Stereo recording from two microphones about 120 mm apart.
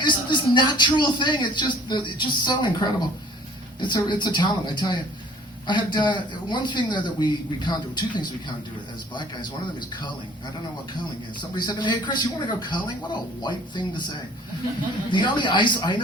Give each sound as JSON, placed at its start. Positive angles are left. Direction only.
{"t": 0.0, "sound": "speech", "side_deg": 40}
{"t": 11.5, "sound": "speech", "side_deg": 35}
{"t": 15.1, "sound": "speech", "side_deg": 40}